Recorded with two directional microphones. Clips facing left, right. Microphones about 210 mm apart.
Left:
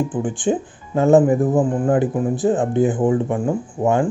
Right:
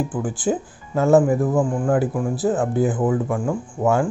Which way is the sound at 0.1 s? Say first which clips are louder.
Left 2 dB; 25° left (ahead or behind).